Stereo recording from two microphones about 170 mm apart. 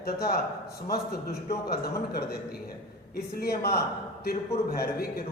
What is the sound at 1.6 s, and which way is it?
Speech, 65° left (ahead or behind).